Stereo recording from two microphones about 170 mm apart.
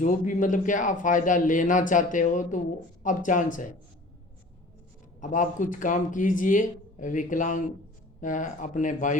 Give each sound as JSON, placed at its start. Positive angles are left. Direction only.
{"t": 0.0, "sound": "a man's voice", "side_deg": 50}
{"t": 5.2, "sound": "a man's voice", "side_deg": 50}